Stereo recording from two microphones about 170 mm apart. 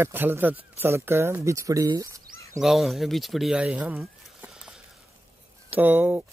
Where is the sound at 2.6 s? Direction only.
Centre (ahead or behind).